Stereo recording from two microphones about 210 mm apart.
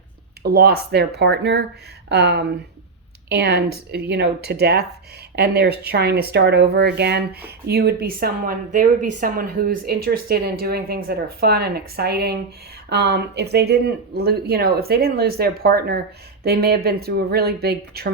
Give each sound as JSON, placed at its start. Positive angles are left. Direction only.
{"t": 0.4, "sound": "speech", "side_deg": -50}